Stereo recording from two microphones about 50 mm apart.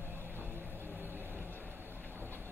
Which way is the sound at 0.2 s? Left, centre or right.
Right.